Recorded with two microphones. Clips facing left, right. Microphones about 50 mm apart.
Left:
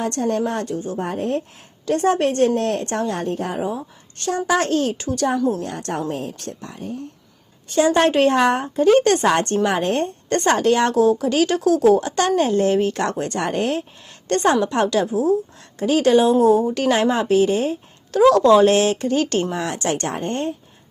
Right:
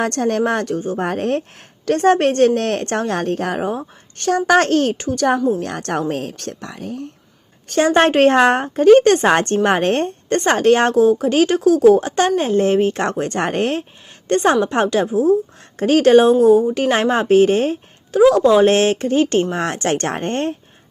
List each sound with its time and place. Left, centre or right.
0.0 s a woman's voice: right
4.9 s speech: right
5.6 s speech: right
7.7 s a woman's voice: right
10.2 s a woman's voice: right
15.8 s a woman's voice: right
18.1 s a woman's voice: centre
18.6 s speech: right
19.5 s a woman's voice: right